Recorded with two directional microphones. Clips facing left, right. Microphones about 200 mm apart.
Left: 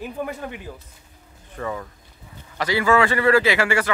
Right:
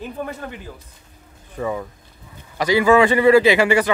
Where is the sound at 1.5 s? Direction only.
15° right (ahead or behind).